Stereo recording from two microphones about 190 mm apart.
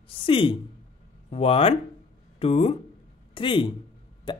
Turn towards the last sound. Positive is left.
turn(degrees=25)  # may be behind; listen again after turning